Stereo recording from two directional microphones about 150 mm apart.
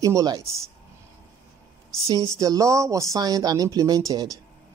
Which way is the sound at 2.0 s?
20° right (ahead or behind).